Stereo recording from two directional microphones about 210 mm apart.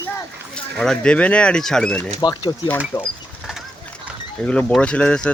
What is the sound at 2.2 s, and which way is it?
Speech, 20° left (ahead or behind).